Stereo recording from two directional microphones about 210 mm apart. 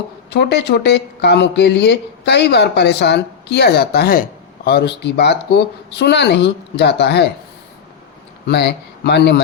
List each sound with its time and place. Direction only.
0.3 s speech: 55° left (ahead or behind)
8.4 s speech: 50° left (ahead or behind)